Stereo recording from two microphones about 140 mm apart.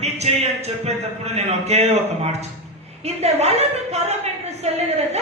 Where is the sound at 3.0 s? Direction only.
50° right (ahead or behind).